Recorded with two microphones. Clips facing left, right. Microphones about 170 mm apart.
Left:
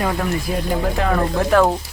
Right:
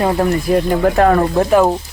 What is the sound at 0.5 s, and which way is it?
Speech, 55° right (ahead or behind).